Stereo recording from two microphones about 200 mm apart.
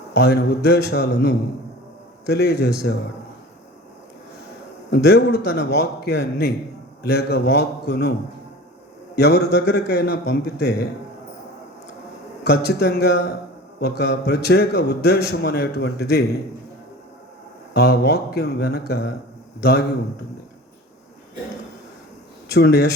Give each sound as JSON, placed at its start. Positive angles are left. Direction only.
{"t": 0.1, "sound": "a man's voice", "side_deg": 55}
{"t": 4.9, "sound": "a man's voice", "side_deg": 50}
{"t": 9.1, "sound": "a man's voice", "side_deg": 55}
{"t": 12.4, "sound": "a man's voice", "side_deg": 55}
{"t": 17.7, "sound": "a man's voice", "side_deg": 55}
{"t": 22.5, "sound": "a man's voice", "side_deg": 55}